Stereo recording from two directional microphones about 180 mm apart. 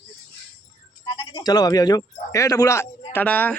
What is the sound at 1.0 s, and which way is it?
A man's voice, 30° left (ahead or behind).